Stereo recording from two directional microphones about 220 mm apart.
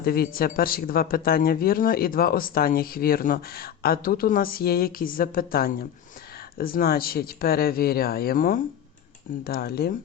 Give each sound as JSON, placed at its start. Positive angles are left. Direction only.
{"t": 0.0, "sound": "speech", "side_deg": 40}